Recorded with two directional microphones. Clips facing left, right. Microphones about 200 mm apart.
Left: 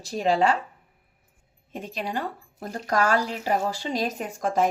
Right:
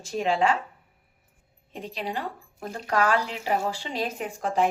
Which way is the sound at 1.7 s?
45° left (ahead or behind).